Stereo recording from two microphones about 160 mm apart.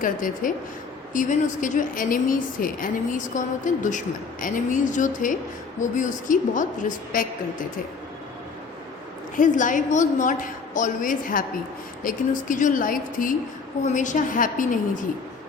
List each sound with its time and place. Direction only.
0.0 s a woman's voice: 55° left (ahead or behind)
9.3 s a woman's voice: 55° left (ahead or behind)